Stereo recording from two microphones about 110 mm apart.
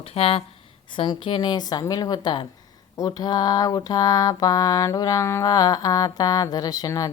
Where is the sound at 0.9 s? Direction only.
50° left (ahead or behind).